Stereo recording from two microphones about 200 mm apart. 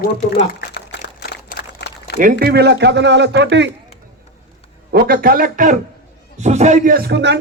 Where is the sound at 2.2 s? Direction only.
45° right (ahead or behind).